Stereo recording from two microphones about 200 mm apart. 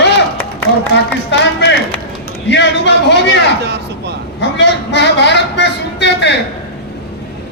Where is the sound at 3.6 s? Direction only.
60° right (ahead or behind).